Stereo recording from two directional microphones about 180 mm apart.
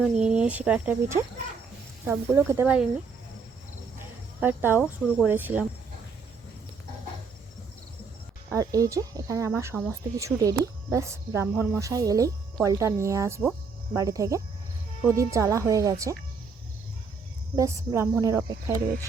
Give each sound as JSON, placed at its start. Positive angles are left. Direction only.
{"t": 0.0, "sound": "speech", "side_deg": -5}
{"t": 4.4, "sound": "speech", "side_deg": -10}
{"t": 8.4, "sound": "speech", "side_deg": -20}
{"t": 17.6, "sound": "speech", "side_deg": -15}